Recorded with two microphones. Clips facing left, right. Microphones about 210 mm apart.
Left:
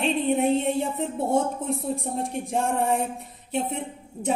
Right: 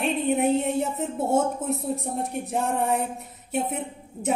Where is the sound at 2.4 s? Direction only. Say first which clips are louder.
Left 1 dB; centre (ahead or behind).